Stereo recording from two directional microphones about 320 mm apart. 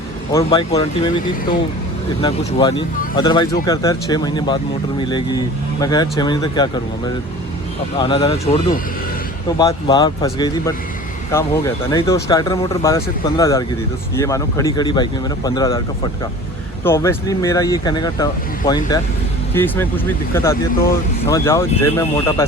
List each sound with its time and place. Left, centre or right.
0.3 s speech: centre
7.9 s speech: centre
16.8 s speech: centre